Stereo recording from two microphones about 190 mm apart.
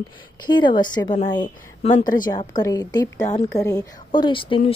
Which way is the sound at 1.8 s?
40° left (ahead or behind).